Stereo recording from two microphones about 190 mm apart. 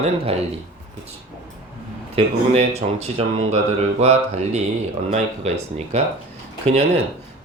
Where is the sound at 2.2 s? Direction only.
35° right (ahead or behind).